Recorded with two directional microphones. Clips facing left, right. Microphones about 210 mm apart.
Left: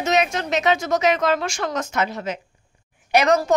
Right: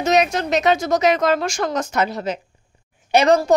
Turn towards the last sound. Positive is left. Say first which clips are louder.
# right 3 dB
turn(degrees=-30)  # may be behind; listen again after turning